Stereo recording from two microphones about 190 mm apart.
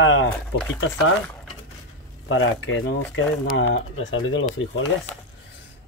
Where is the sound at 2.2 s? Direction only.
90° left.